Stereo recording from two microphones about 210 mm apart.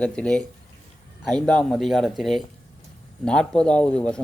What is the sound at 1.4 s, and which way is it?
Speech, 5° left (ahead or behind).